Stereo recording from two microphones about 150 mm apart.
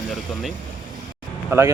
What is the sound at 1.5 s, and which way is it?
Speech, 20° right (ahead or behind).